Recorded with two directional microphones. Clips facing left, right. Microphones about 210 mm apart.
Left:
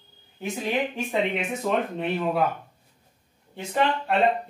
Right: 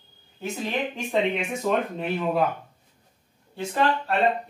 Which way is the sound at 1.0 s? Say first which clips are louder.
Right 1 dB; 5° left (ahead or behind).